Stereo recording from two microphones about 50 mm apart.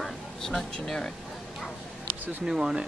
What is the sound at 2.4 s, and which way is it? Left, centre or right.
Speech, centre.